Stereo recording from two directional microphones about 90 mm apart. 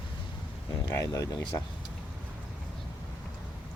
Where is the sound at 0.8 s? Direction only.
40° left (ahead or behind).